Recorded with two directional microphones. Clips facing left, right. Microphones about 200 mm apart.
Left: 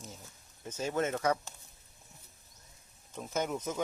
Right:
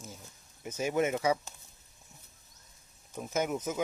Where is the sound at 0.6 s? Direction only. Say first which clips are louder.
Right 3 dB; 10° right (ahead or behind).